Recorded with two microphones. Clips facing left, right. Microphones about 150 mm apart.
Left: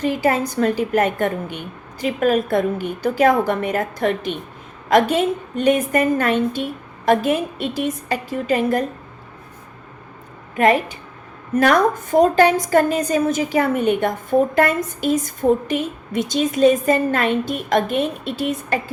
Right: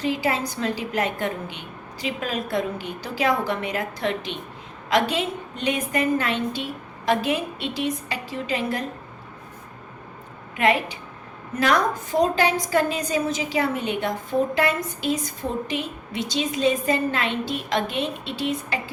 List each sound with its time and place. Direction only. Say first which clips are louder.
0.0 s a woman's voice: left 5 dB; 50° left (ahead or behind)
10.6 s a woman's voice: left 5 dB; 45° left (ahead or behind)